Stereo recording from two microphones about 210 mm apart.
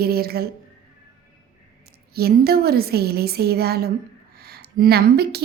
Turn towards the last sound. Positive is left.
turn(degrees=-50)  # may be behind; listen again after turning